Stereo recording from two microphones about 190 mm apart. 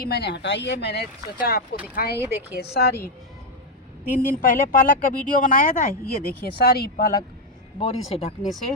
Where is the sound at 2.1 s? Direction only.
15° right (ahead or behind).